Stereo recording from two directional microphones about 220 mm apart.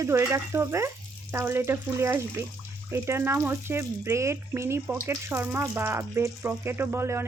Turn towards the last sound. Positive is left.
turn(degrees=-10)  # may be behind; listen again after turning